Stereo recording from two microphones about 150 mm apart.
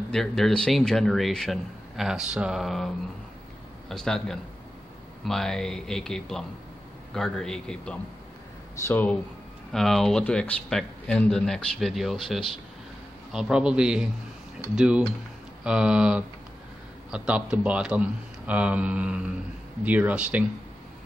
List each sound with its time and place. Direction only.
0.1 s speech: 5° left (ahead or behind)
3.9 s speech: 5° left (ahead or behind)
9.7 s a man's voice: centre (ahead or behind)